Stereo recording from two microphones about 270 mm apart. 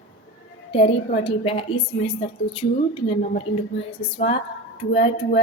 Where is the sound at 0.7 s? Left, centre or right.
Left.